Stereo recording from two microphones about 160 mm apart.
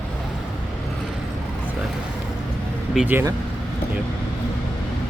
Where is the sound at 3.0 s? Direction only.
10° right (ahead or behind).